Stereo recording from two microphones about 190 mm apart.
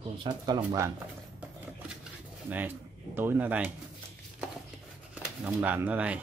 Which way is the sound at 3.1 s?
10° right (ahead or behind).